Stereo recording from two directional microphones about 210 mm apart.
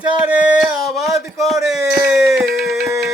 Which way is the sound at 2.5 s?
45° right (ahead or behind).